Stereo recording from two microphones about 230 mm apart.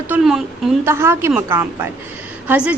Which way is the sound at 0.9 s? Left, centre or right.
Centre.